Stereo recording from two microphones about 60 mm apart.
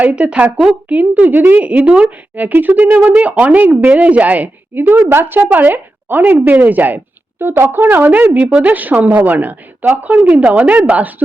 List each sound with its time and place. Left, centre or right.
0.0 s a woman's voice: right
4.8 s a woman's voice: right